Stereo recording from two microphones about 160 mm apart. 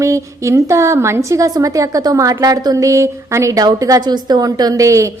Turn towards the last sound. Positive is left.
turn(degrees=-20)  # may be behind; listen again after turning